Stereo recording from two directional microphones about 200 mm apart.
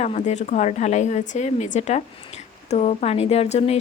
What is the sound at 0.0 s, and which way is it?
A woman's voice, 35° left (ahead or behind).